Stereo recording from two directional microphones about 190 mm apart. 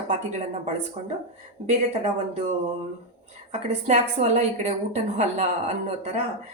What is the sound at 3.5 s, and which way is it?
A woman's voice, 35° right (ahead or behind).